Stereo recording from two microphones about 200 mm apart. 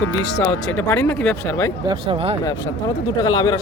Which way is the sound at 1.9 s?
25° right (ahead or behind).